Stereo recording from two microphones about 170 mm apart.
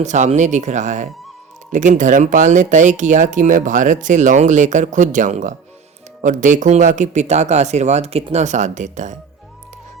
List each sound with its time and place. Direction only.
0.0 s speech: 45° right (ahead or behind)